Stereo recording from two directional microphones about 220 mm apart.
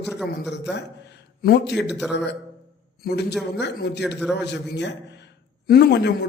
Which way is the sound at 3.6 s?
50° left (ahead or behind).